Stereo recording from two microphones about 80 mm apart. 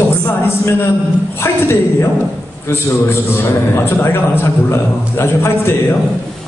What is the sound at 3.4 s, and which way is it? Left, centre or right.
A man's voice, left.